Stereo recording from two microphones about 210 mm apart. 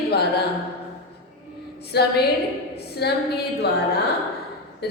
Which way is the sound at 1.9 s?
50° left (ahead or behind).